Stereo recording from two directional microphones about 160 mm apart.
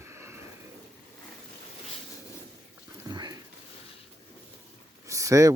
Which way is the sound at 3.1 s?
30° right (ahead or behind).